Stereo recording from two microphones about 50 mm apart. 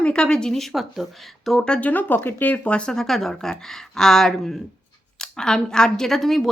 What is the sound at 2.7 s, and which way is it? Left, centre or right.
Speech, left.